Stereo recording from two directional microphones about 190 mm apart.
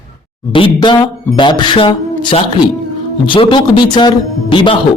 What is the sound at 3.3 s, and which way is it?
A man's voice, 25° left (ahead or behind).